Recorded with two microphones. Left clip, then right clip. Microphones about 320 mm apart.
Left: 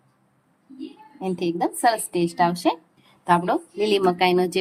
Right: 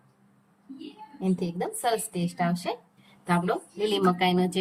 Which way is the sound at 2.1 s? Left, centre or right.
Centre.